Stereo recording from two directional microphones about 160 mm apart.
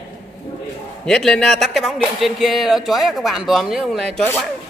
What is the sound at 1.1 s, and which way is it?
Speech, 5° left (ahead or behind).